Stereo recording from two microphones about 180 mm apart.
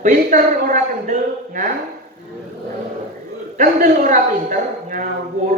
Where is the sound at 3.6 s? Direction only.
50° right (ahead or behind).